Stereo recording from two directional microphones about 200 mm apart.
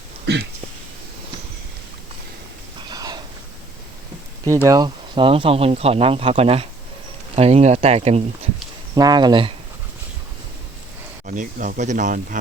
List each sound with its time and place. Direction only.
2.9 s a sound: 20° right (ahead or behind)
4.4 s speech: 15° right (ahead or behind); by 8.4 s 30° right (ahead or behind)
9.0 s speech: 20° right (ahead or behind)
11.3 s speech: 40° right (ahead or behind)